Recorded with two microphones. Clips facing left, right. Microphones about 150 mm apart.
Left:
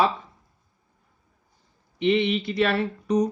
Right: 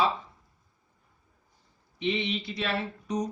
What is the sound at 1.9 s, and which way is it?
Speech, 65° left (ahead or behind).